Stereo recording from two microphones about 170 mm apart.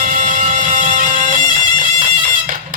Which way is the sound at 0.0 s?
50° right (ahead or behind).